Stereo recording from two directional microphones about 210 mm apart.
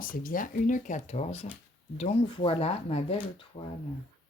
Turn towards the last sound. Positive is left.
turn(degrees=30)  # may be behind; listen again after turning